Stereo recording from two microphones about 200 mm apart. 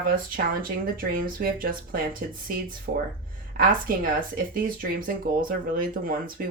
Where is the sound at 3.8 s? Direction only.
45° right (ahead or behind).